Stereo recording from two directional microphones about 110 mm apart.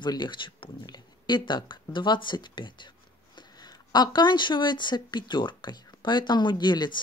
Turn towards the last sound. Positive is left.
turn(degrees=40)  # may be behind; listen again after turning